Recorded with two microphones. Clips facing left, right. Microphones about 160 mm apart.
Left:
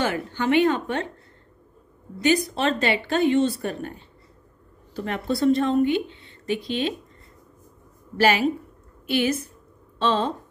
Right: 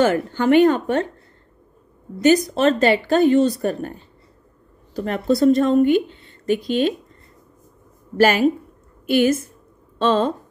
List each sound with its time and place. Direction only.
0.0 s speech: 45° right (ahead or behind)
2.2 s speech: 45° right (ahead or behind)
8.2 s a woman's voice: 50° right (ahead or behind)